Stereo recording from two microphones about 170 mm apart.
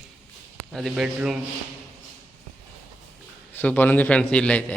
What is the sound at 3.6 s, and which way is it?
A man's voice, 10° left (ahead or behind).